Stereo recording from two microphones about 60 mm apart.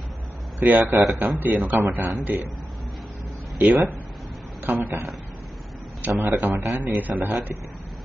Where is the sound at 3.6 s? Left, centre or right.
Right.